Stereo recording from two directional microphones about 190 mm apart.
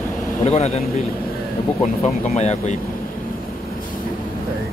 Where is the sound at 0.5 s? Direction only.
35° left (ahead or behind).